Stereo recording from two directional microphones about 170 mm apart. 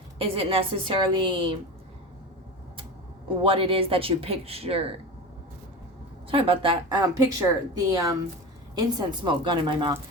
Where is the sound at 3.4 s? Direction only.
30° right (ahead or behind).